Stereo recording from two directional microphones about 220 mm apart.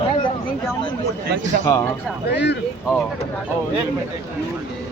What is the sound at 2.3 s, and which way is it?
Speech, 50° left (ahead or behind).